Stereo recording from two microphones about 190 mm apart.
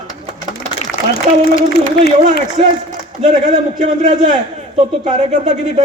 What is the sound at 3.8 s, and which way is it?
Speech, 40° right (ahead or behind).